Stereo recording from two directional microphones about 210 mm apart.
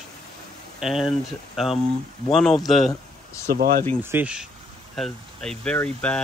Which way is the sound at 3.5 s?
45° right (ahead or behind).